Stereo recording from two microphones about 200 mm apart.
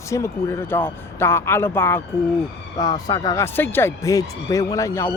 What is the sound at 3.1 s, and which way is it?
Speech, 20° left (ahead or behind).